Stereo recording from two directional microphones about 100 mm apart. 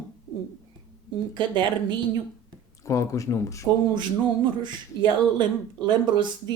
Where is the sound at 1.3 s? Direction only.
50° right (ahead or behind).